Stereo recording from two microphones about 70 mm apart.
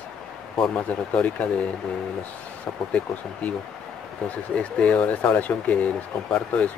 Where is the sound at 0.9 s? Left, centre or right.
Centre.